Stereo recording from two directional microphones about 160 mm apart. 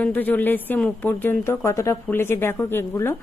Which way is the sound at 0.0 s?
10° left (ahead or behind).